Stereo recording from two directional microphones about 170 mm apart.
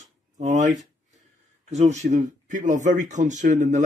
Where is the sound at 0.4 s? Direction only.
45° right (ahead or behind).